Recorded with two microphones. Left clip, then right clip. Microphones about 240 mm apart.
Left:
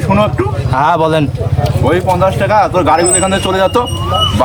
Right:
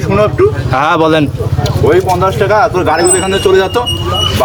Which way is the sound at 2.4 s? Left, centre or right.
Centre.